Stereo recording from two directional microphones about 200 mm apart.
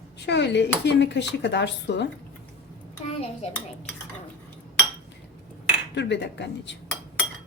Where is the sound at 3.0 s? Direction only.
30° left (ahead or behind).